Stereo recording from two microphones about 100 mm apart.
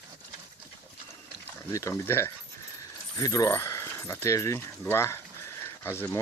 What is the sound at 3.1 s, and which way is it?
Speech, 40° left (ahead or behind).